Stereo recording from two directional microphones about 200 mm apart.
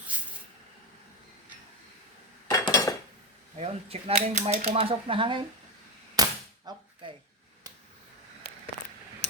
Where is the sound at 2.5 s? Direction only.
15° left (ahead or behind).